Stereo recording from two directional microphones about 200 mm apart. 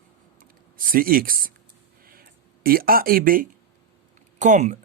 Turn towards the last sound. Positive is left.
turn(degrees=-35)  # may be behind; listen again after turning